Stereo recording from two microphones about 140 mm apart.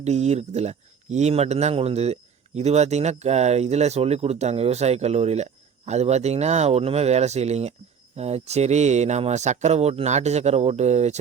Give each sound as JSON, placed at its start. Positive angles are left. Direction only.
{"t": 0.0, "sound": "speech", "side_deg": -50}